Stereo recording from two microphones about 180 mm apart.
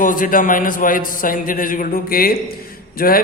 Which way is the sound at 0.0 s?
50° left (ahead or behind).